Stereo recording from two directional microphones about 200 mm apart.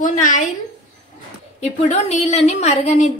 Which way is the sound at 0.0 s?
40° left (ahead or behind).